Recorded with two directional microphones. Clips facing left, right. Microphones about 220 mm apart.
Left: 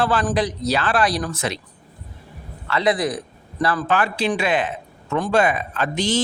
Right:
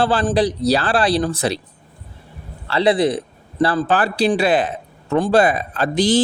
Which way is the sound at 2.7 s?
30° right (ahead or behind).